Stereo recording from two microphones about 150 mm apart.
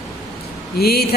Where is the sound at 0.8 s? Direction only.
90° left.